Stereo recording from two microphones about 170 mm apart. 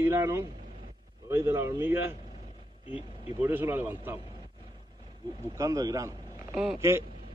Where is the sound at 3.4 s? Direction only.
15° right (ahead or behind).